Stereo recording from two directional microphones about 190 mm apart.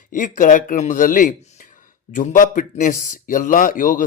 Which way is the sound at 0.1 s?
45° left (ahead or behind).